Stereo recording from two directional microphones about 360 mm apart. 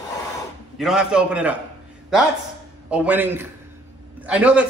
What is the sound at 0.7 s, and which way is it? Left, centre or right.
Speech, centre.